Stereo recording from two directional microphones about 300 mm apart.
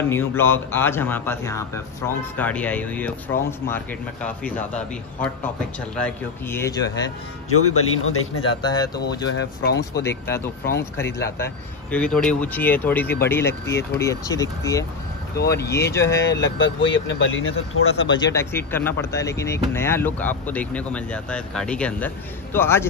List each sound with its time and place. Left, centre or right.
0.1 s speech: centre
7.5 s speech: left
8.6 s speech: centre
9.7 s speech: left
10.0 s speech: centre
16.3 s speech: left
18.1 s speech: centre